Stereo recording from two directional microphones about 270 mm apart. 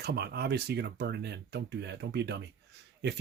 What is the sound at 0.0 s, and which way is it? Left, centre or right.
Speech, right.